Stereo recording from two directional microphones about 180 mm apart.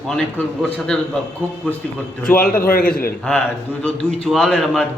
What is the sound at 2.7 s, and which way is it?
Speech, 55° left (ahead or behind).